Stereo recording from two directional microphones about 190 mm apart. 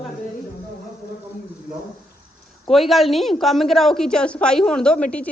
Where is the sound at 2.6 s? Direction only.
Centre (ahead or behind).